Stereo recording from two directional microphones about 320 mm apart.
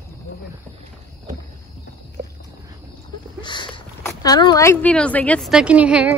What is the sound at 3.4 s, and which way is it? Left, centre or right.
Speech, centre.